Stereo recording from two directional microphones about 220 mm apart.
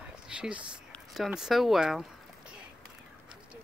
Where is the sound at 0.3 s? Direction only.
5° right (ahead or behind).